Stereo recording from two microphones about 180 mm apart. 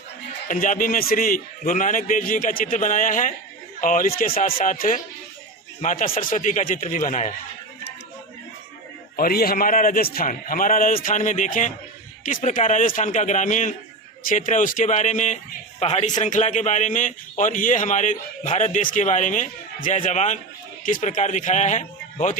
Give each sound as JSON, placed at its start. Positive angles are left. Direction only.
{"t": 0.4, "sound": "a man's voice", "side_deg": 45}
{"t": 9.1, "sound": "a man's voice", "side_deg": 55}